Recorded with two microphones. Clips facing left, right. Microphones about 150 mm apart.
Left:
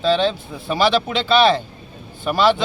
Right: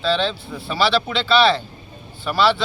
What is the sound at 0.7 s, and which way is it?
Speech, 45° left (ahead or behind).